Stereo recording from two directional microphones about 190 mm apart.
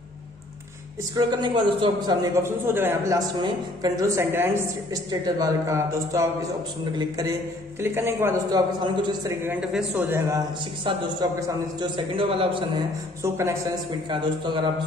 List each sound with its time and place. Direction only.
1.1 s a woman's voice: 20° right (ahead or behind)
9.5 s a woman's voice: 5° right (ahead or behind)
10.8 s a woman's voice: 25° right (ahead or behind)
13.2 s a woman's voice: 15° right (ahead or behind)